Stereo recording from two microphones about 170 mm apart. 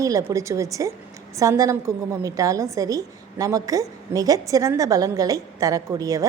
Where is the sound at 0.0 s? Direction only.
20° right (ahead or behind).